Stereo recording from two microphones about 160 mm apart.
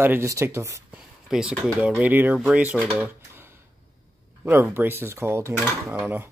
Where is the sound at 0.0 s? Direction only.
15° right (ahead or behind).